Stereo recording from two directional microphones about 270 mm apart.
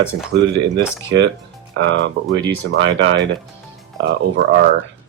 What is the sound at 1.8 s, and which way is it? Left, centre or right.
Speech, right.